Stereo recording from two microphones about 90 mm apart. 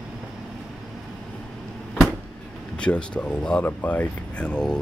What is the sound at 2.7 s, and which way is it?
Speech, 10° left (ahead or behind).